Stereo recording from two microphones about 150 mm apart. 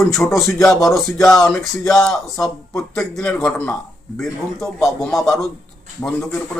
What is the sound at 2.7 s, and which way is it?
Speech, 20° left (ahead or behind).